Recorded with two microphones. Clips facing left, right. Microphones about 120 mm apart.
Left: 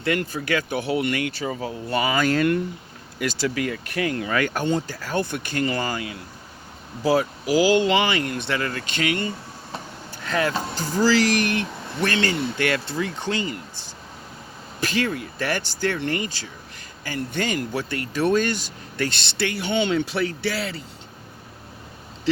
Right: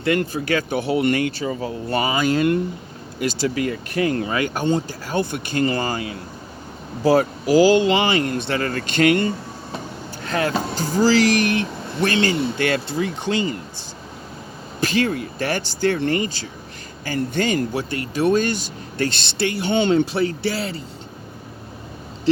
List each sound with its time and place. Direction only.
0.0 s speech: 30° right (ahead or behind)
2.1 s speech: 20° right (ahead or behind)
3.4 s speech: 30° right (ahead or behind)
4.4 s speech: 20° right (ahead or behind)
7.0 s speech: 45° right (ahead or behind)
7.7 s speech: 30° right (ahead or behind); by 9.3 s 50° right (ahead or behind)
10.2 s speech: 40° right (ahead or behind)
10.5 s speech: 15° right (ahead or behind)
11.5 s speech: 25° right (ahead or behind)
14.8 s speech: 30° right (ahead or behind)